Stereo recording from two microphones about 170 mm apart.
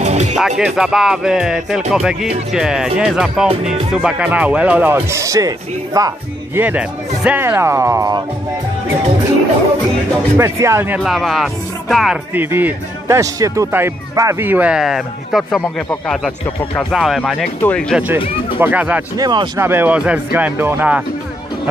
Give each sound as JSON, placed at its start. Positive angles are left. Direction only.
{"t": 0.0, "sound": "music", "side_deg": -40}
{"t": 0.4, "sound": "speech", "side_deg": 0}
{"t": 6.6, "sound": "speech", "side_deg": -10}
{"t": 10.3, "sound": "speech", "side_deg": -15}
{"t": 11.0, "sound": "speech", "side_deg": 0}
{"t": 12.4, "sound": "speech", "side_deg": -10}
{"t": 16.9, "sound": "speech", "side_deg": 0}
{"t": 17.9, "sound": "speech", "side_deg": -10}
{"t": 19.1, "sound": "speech", "side_deg": -25}